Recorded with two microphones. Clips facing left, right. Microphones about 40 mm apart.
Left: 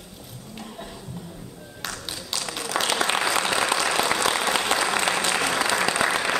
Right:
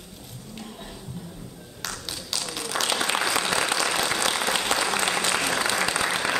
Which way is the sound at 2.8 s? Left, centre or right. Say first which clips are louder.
Left 2 dB; centre.